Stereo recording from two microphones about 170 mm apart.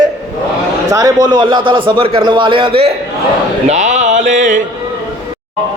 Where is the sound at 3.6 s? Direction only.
45° right (ahead or behind).